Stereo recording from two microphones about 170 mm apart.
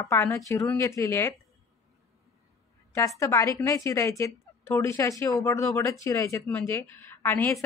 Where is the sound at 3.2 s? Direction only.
15° left (ahead or behind).